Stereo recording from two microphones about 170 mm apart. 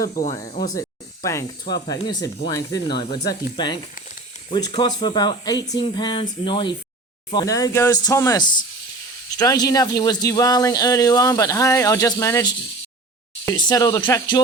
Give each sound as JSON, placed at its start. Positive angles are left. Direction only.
{"t": 0.1, "sound": "speech", "side_deg": 45}
{"t": 0.7, "sound": "spray", "side_deg": 20}
{"t": 1.7, "sound": "speech", "side_deg": 20}
{"t": 13.6, "sound": "speech", "side_deg": 25}